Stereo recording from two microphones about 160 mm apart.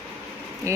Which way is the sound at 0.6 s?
20° right (ahead or behind).